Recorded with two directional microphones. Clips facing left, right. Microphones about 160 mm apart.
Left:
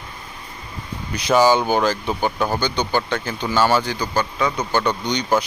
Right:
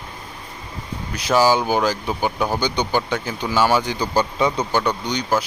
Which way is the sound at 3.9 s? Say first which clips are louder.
Right 2 dB; 30° right (ahead or behind).